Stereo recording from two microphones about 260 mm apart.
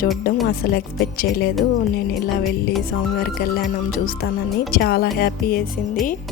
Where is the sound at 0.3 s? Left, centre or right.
Left.